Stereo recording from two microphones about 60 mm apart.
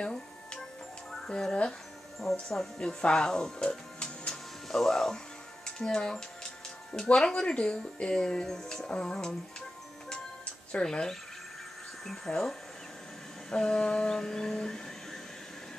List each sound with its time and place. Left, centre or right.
0.0 s music: centre
1.5 s speech: centre
2.1 s speech: centre
2.8 s speech: centre
10.7 s speech: centre
12.3 s speech: centre